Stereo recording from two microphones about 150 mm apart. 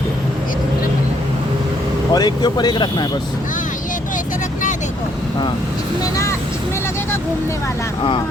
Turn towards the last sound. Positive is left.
turn(degrees=20)  # may be behind; listen again after turning